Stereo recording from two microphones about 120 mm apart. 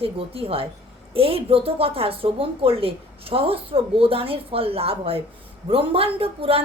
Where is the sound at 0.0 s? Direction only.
50° right (ahead or behind).